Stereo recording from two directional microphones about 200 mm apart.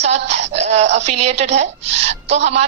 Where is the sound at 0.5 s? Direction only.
35° right (ahead or behind).